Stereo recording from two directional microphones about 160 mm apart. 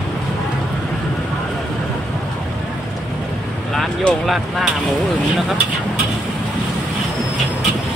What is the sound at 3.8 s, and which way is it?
Speech, centre (ahead or behind).